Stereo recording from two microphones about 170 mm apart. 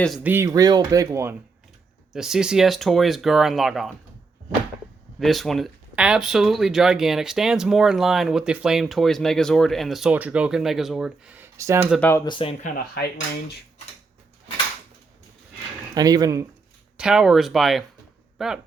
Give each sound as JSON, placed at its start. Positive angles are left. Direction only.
{"t": 0.2, "sound": "speech", "side_deg": -10}
{"t": 2.1, "sound": "speech", "side_deg": -5}
{"t": 5.2, "sound": "speech", "side_deg": 0}
{"t": 11.9, "sound": "speech", "side_deg": 10}
{"t": 12.2, "sound": "speech", "side_deg": 30}
{"t": 12.6, "sound": "speech", "side_deg": 60}
{"t": 16.0, "sound": "speech", "side_deg": -20}
{"t": 17.0, "sound": "speech", "side_deg": -5}